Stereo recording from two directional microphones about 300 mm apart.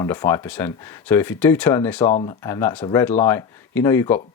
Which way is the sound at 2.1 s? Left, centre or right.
Centre.